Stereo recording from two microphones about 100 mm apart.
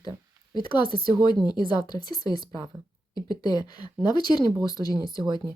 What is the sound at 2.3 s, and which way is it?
Speech, 50° right (ahead or behind).